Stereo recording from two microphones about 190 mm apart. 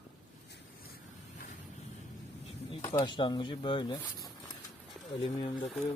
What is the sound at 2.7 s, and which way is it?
Speech, 25° left (ahead or behind).